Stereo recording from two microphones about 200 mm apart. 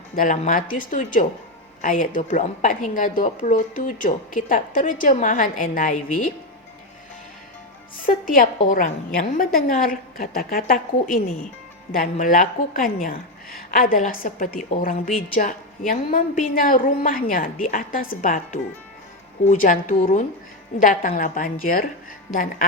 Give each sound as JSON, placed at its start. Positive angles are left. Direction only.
{"t": 0.2, "sound": "a woman's voice", "side_deg": 40}
{"t": 8.3, "sound": "a woman's voice", "side_deg": 45}